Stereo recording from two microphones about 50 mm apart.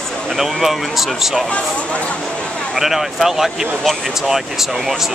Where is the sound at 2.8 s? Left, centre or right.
Centre.